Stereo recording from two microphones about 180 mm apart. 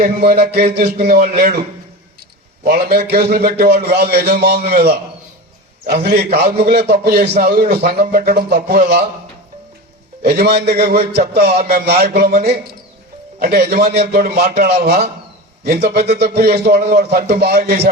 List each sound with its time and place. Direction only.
0.0 s a man's voice: 60° right (ahead or behind)
1.0 s a man's voice: 50° right (ahead or behind)
2.6 s a man's voice: 60° right (ahead or behind)
10.3 s a man's voice: 65° right (ahead or behind)